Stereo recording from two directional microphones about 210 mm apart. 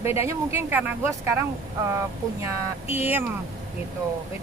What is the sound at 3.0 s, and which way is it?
Speech, 10° right (ahead or behind).